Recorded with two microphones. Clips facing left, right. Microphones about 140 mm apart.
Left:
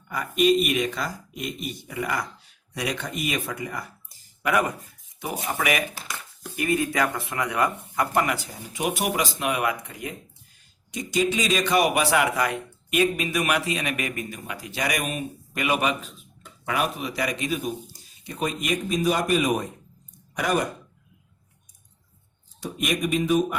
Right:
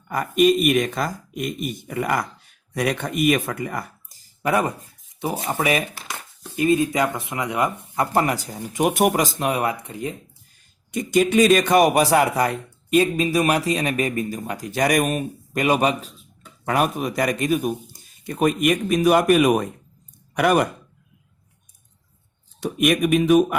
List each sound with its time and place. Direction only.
0.1 s speech: 45° right (ahead or behind)
4.4 s speech: 30° right (ahead or behind)
8.1 s a man's voice: 35° right (ahead or behind)
10.9 s a man's voice: 55° right (ahead or behind)
22.6 s speech: 60° right (ahead or behind)